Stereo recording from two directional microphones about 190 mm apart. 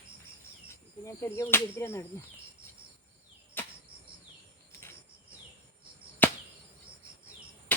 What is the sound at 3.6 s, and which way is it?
Cricket, 10° left (ahead or behind).